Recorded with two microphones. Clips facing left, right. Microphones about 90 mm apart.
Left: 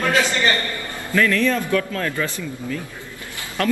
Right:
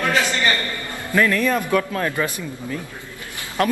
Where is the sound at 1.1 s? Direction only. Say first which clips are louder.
Even; 20° right (ahead or behind).